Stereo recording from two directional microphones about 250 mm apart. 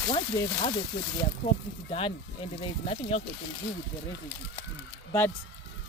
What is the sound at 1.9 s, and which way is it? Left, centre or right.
Speech, left.